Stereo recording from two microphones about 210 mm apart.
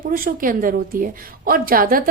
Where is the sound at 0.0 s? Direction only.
40° right (ahead or behind).